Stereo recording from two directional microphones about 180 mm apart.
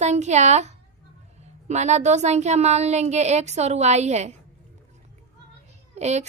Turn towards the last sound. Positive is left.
turn(degrees=-40)  # may be behind; listen again after turning